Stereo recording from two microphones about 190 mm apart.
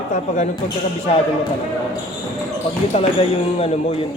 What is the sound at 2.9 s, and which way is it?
Speech, 35° left (ahead or behind).